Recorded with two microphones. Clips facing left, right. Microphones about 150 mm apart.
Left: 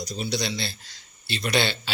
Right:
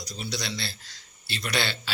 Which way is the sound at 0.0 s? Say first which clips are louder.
Left 6 dB; 20° left (ahead or behind).